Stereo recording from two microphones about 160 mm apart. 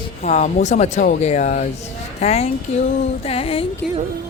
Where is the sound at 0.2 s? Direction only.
45° left (ahead or behind).